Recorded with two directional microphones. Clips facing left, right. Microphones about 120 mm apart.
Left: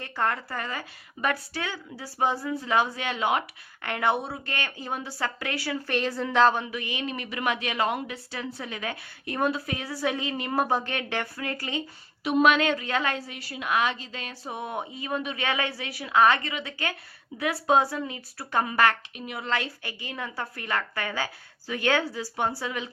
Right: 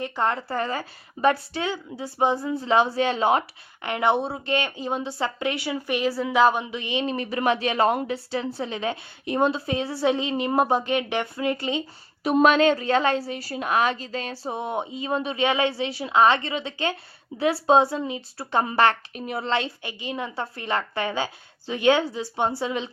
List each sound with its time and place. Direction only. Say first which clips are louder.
0.0 s a woman's voice: right 3 dB; 20° right (ahead or behind)
3.8 s a woman's voice: right 4 dB; 20° right (ahead or behind)
12.2 s a woman's voice: right 4 dB; 40° right (ahead or behind); by 22.9 s 25° right (ahead or behind)